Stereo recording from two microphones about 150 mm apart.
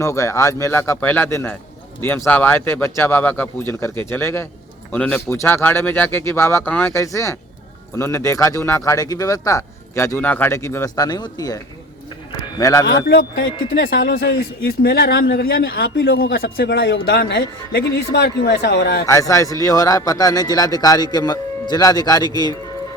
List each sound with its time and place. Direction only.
0.0 s speech: 20° left (ahead or behind)
13.1 s a man's voice: 90° left
19.0 s speech: 20° left (ahead or behind)